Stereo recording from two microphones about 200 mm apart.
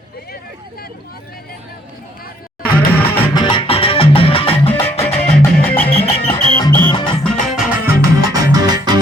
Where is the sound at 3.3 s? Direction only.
25° left (ahead or behind).